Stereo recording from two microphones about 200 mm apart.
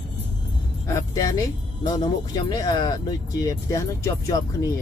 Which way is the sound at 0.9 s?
15° left (ahead or behind).